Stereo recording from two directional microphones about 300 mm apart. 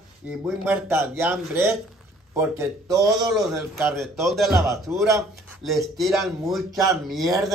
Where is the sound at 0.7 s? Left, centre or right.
Centre.